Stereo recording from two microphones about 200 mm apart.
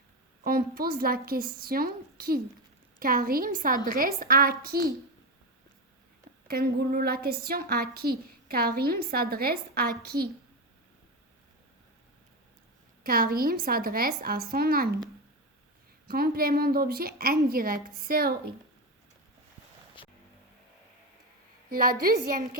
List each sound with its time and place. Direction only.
0.4 s a woman's voice: 50° right (ahead or behind)
6.5 s a woman's voice: 50° right (ahead or behind)
13.0 s a woman's voice: 45° right (ahead or behind)
16.0 s a woman's voice: 50° right (ahead or behind)
20.0 s vehicle: 25° left (ahead or behind)
21.7 s a woman's voice: 45° right (ahead or behind)